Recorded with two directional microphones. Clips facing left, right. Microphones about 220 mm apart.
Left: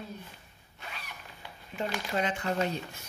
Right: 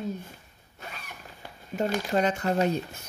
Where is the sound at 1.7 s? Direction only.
40° right (ahead or behind).